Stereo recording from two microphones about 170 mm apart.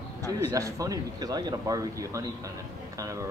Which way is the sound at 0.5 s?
20° right (ahead or behind).